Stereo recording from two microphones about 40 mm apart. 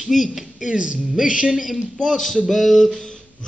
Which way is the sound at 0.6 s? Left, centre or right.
Centre.